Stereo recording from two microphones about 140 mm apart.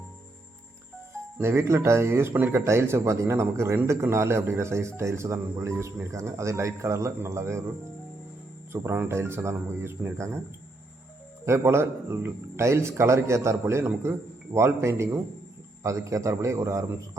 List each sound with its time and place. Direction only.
1.4 s speech: 20° right (ahead or behind)
8.7 s speech: 15° right (ahead or behind)
11.4 s speech: 20° right (ahead or behind)